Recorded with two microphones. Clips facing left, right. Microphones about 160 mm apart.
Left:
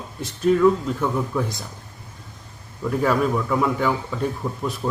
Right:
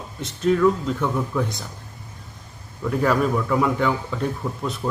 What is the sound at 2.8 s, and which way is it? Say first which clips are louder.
A man's voice: even; centre (ahead or behind).